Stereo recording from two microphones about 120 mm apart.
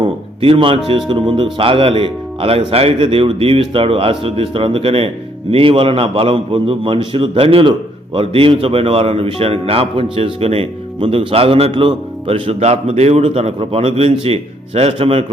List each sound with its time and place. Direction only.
0.0 s speech: 50° right (ahead or behind)